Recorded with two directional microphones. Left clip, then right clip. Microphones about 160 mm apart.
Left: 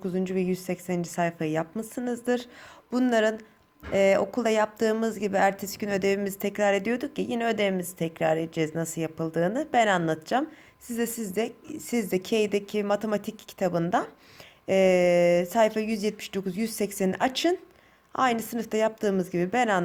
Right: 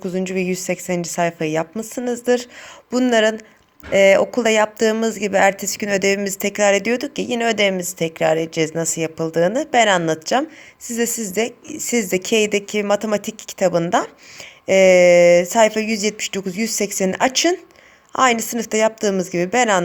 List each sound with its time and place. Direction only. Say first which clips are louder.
0.0 s speech: right 6 dB; 15° right (ahead or behind)